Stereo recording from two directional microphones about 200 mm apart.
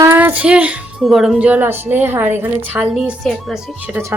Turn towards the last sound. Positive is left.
turn(degrees=-10)  # may be behind; listen again after turning